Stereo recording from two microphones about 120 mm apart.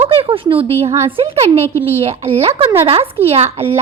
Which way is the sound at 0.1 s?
50° right (ahead or behind).